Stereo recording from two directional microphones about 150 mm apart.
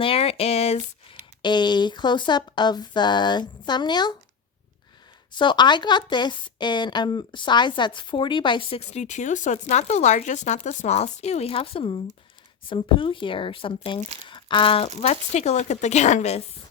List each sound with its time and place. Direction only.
0.0 s a sound: 40° left (ahead or behind)
1.4 s speech: 30° left (ahead or behind)
5.3 s a woman's voice: 30° left (ahead or behind)
8.8 s a woman's voice: 50° left (ahead or behind)
15.0 s speech: 50° left (ahead or behind)